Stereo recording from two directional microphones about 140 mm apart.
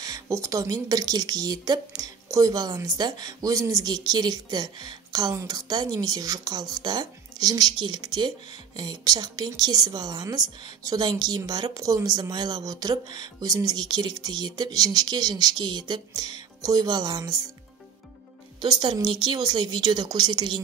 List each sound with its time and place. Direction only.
0.0 s a woman's voice: 25° right (ahead or behind)
18.6 s a woman's voice: 35° right (ahead or behind)